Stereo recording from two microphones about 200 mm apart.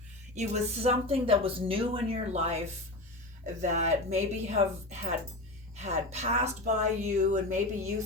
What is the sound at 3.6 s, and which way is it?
A woman's voice, 35° right (ahead or behind).